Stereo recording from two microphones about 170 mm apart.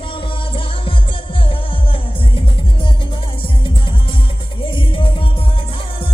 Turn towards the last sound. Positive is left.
turn(degrees=30)  # may be behind; listen again after turning